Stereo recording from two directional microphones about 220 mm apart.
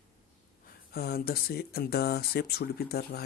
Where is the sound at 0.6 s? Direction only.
45° left (ahead or behind).